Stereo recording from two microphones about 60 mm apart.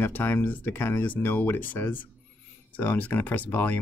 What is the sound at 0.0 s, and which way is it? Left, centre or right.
Speech, left.